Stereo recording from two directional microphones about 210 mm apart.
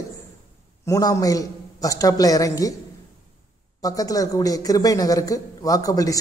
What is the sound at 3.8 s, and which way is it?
Speech, 15° left (ahead or behind).